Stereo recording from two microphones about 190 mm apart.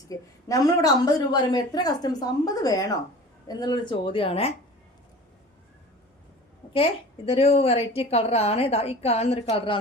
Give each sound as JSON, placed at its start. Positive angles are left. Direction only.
{"t": 0.1, "sound": "a woman's voice", "side_deg": 20}
{"t": 7.3, "sound": "a woman's voice", "side_deg": 30}